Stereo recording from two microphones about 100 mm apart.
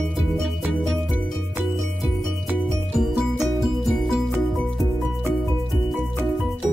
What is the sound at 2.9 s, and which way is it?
Music, centre (ahead or behind).